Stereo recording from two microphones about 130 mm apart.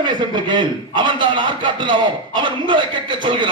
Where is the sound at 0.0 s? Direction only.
35° right (ahead or behind).